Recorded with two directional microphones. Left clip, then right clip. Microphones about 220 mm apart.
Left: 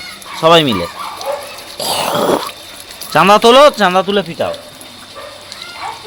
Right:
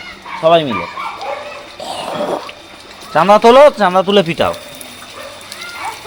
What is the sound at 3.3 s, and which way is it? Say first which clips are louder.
Speech: right 1 dB; 10° left (ahead or behind).